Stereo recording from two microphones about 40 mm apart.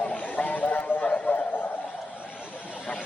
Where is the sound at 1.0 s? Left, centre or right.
Left.